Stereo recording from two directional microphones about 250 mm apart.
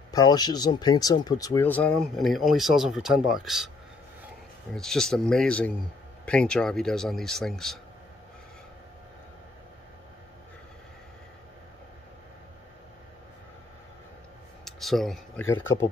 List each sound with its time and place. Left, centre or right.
0.1 s speech: centre
4.7 s speech: centre
14.6 s a sound: centre